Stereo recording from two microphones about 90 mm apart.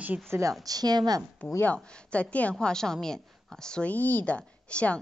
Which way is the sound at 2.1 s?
15° left (ahead or behind).